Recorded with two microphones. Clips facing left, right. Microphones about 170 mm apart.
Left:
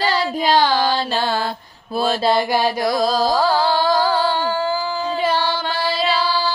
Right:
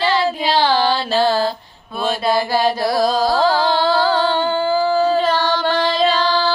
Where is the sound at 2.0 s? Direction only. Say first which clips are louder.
Left 1 dB; 25° left (ahead or behind).